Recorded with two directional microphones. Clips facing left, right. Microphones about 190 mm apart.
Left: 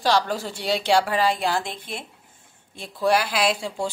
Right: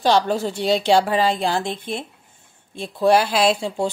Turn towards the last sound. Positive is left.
turn(degrees=-25)  # may be behind; listen again after turning